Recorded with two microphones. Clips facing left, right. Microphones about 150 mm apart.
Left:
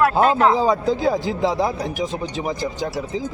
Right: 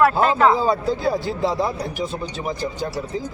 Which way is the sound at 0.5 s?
20° left (ahead or behind).